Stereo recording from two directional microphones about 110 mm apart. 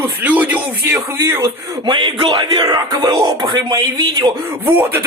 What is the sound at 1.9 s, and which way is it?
Speech, 50° right (ahead or behind).